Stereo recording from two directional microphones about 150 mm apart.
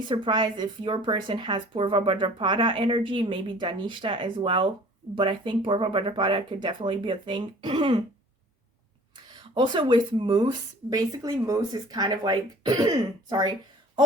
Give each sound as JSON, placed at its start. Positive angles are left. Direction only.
{"t": 0.1, "sound": "speech", "side_deg": -30}
{"t": 9.1, "sound": "speech", "side_deg": -30}